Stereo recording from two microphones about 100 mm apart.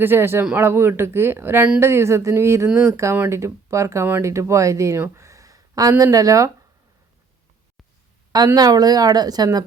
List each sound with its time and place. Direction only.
0.0 s speech: 25° right (ahead or behind)
8.5 s speech: 40° right (ahead or behind)